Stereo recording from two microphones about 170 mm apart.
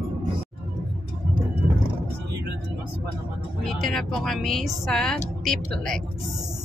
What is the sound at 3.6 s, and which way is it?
Speech, centre (ahead or behind).